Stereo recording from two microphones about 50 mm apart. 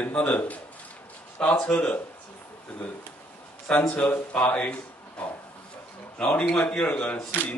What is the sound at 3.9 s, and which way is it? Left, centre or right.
A man's voice, left.